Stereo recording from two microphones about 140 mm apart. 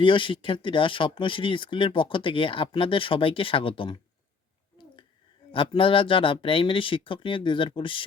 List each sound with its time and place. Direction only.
0.0 s speech: 35° left (ahead or behind)
5.5 s speech: 40° left (ahead or behind)